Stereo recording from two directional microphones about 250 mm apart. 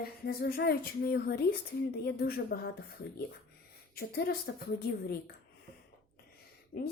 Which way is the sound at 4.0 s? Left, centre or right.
Left.